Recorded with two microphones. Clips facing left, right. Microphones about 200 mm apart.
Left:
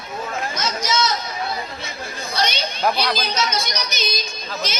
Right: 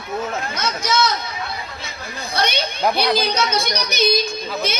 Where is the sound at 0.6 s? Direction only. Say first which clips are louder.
Right 3 dB; 60° right (ahead or behind).